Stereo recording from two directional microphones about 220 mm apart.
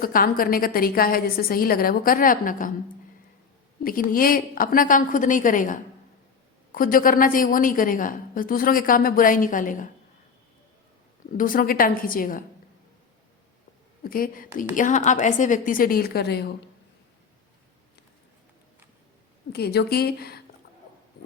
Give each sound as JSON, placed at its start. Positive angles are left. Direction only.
{"t": 0.0, "sound": "a woman's voice", "side_deg": 40}
{"t": 3.8, "sound": "a woman's voice", "side_deg": 40}
{"t": 11.3, "sound": "a woman's voice", "side_deg": 40}
{"t": 14.0, "sound": "a woman's voice", "side_deg": 40}
{"t": 19.5, "sound": "a woman's voice", "side_deg": 45}